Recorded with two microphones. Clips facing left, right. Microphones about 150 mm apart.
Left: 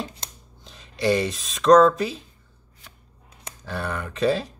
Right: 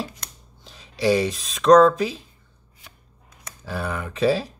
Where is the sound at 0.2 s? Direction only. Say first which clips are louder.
Left 2 dB; 30° left (ahead or behind).